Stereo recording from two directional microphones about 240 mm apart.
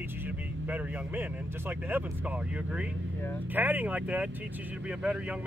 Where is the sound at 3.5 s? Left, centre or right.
Centre.